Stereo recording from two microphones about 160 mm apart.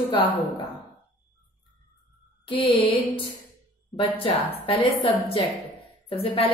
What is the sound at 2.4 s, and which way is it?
A woman's voice, 35° left (ahead or behind).